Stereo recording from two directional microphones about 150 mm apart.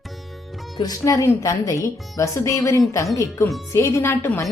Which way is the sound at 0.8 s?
25° left (ahead or behind).